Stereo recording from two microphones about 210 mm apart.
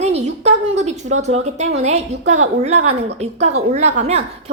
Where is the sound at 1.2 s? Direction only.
30° right (ahead or behind).